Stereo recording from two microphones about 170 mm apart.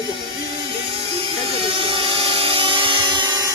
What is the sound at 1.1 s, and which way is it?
Vehicle, 35° right (ahead or behind).